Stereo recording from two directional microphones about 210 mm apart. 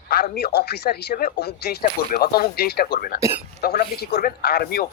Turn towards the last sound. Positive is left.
turn(degrees=45)  # may be behind; listen again after turning